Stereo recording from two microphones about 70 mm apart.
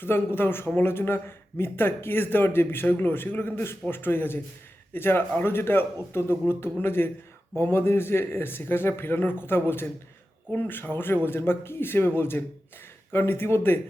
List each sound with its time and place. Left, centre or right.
0.0 s a man's voice: left